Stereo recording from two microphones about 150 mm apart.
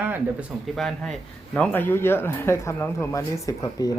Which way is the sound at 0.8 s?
Centre (ahead or behind).